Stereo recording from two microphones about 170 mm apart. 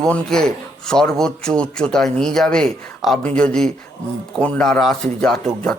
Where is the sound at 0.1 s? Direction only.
5° left (ahead or behind).